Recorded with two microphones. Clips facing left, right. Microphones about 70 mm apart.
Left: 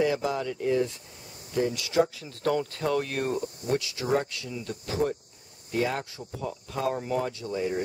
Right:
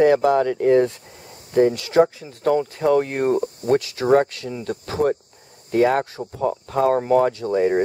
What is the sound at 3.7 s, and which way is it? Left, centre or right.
Speech, right.